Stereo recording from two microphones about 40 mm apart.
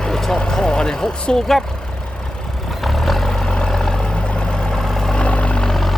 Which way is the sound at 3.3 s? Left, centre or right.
Centre.